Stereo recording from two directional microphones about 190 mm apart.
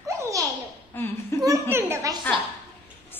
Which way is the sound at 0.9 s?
10° left (ahead or behind).